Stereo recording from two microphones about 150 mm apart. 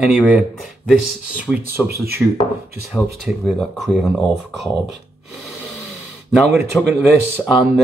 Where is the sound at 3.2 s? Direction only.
Centre (ahead or behind).